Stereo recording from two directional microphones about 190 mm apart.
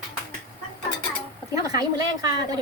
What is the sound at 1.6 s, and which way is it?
Speech, 20° right (ahead or behind).